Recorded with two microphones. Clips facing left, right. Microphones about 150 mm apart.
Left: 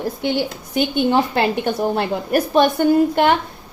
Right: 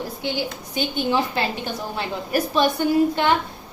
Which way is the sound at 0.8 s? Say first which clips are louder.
Left 5 dB; 60° left (ahead or behind).